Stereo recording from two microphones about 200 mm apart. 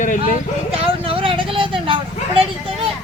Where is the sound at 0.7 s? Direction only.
30° right (ahead or behind).